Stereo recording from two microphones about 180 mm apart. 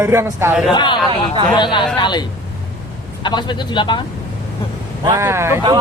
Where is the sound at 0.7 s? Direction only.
25° left (ahead or behind).